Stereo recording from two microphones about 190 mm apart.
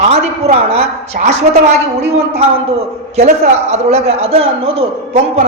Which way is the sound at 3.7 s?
35° right (ahead or behind).